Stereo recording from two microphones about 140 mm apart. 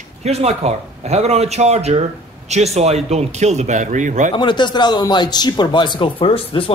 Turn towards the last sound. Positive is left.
turn(degrees=40)  # may be behind; listen again after turning